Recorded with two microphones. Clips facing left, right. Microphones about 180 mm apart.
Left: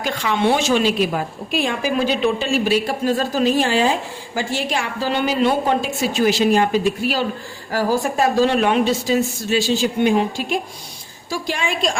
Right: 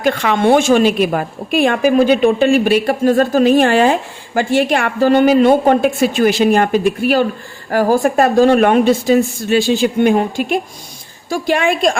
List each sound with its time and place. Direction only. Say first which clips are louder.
0.0 s a woman's voice: right 6 dB; 60° right (ahead or behind)